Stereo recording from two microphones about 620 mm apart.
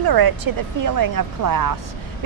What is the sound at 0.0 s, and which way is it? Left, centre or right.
Speech, right.